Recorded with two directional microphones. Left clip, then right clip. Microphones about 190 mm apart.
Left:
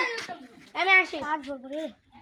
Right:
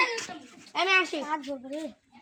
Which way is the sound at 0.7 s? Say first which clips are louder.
Left 3 dB; 60° right (ahead or behind).